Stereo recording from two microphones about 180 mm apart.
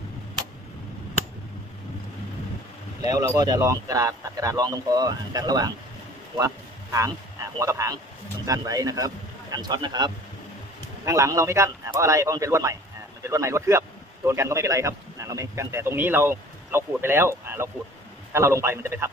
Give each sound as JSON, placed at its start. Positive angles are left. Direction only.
{"t": 3.0, "sound": "speech", "side_deg": -20}
{"t": 6.3, "sound": "a sound", "side_deg": -15}
{"t": 7.5, "sound": "a man's voice", "side_deg": -15}